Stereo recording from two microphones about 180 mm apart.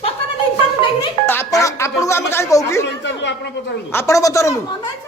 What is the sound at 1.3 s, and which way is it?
Music, 15° left (ahead or behind).